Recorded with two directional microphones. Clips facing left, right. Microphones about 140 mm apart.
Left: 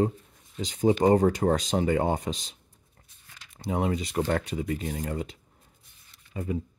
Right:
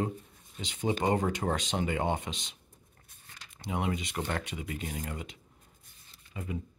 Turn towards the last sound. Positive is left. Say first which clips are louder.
# left 7 dB
turn(degrees=35)  # may be behind; listen again after turning